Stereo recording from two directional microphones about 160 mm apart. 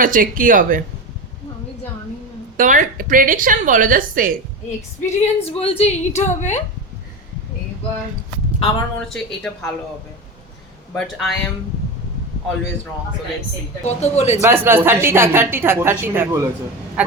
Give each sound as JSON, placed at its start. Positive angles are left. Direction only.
{"t": 0.0, "sound": "a woman's voice", "side_deg": -60}
{"t": 2.6, "sound": "a woman's voice", "side_deg": -55}
{"t": 5.0, "sound": "a woman's voice", "side_deg": 40}
{"t": 8.5, "sound": "speech", "side_deg": 35}
{"t": 9.0, "sound": "a woman's voice", "side_deg": 5}
{"t": 10.9, "sound": "a woman's voice", "side_deg": 0}
{"t": 13.8, "sound": "a woman's voice", "side_deg": 45}
{"t": 14.4, "sound": "a woman's voice", "side_deg": -15}